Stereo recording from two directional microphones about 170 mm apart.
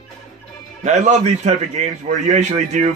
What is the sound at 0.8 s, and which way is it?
Speech, 45° right (ahead or behind).